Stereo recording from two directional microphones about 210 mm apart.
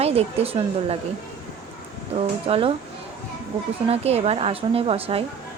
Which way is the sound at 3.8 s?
30° right (ahead or behind).